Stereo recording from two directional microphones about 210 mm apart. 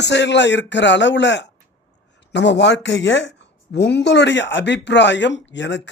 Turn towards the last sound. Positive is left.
turn(degrees=60)  # may be behind; listen again after turning